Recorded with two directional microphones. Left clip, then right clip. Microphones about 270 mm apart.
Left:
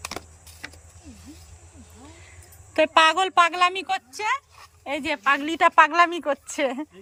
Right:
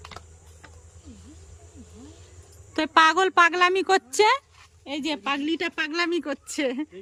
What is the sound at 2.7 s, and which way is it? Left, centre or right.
A woman's voice, centre.